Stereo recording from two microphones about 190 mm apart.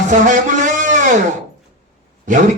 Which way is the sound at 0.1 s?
40° right (ahead or behind).